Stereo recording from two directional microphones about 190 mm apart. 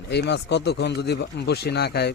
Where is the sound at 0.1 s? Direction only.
60° left (ahead or behind).